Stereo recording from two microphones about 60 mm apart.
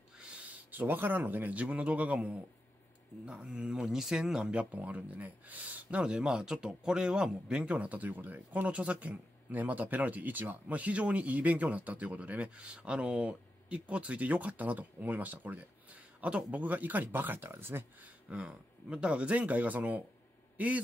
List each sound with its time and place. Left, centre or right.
0.2 s a sound: centre
0.7 s speech: right
18.3 s speech: centre